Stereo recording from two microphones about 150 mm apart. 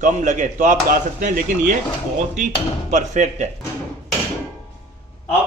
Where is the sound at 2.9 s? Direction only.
55° right (ahead or behind).